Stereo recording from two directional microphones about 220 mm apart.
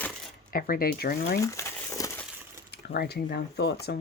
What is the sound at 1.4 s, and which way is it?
Crumpling, 15° left (ahead or behind).